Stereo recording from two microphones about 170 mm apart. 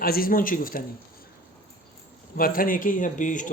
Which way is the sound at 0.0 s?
60° left (ahead or behind).